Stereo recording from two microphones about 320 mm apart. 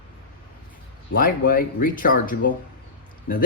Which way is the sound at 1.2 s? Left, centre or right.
Left.